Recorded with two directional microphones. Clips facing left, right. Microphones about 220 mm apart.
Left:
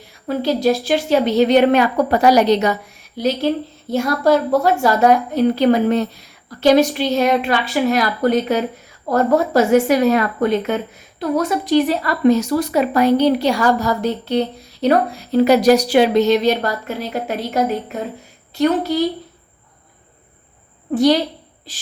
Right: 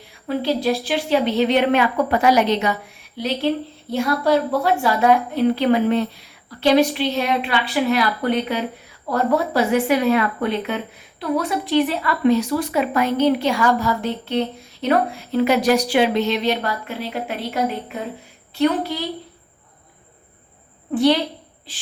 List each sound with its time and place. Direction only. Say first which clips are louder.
0.3 s a woman's voice: left 3 dB; 45° left (ahead or behind)
20.9 s a woman's voice: left 3 dB; 40° left (ahead or behind)